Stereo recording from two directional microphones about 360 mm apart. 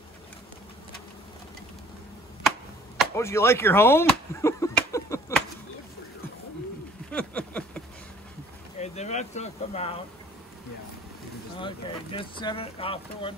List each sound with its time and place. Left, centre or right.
3.0 s speech: centre
7.1 s a sound: centre
8.7 s speech: centre
11.6 s speech: centre